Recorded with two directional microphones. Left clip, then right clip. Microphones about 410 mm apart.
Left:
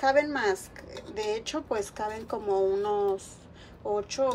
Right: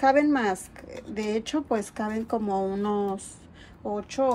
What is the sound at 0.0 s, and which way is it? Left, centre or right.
Speech, centre.